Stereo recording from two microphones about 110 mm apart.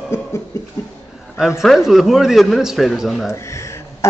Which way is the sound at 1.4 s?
Centre (ahead or behind).